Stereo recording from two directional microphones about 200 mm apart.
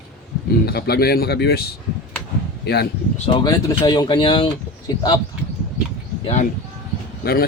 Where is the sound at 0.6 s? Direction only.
50° left (ahead or behind).